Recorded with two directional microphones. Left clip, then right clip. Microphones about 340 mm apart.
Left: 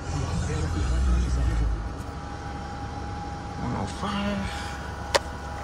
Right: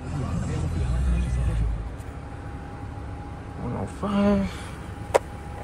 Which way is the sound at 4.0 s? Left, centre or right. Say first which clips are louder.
Right 8 dB; centre.